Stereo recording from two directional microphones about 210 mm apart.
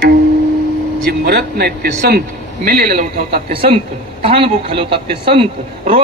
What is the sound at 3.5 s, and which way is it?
A man's voice, 25° right (ahead or behind).